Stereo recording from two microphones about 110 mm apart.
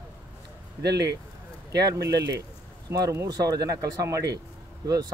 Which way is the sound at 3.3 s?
35° right (ahead or behind).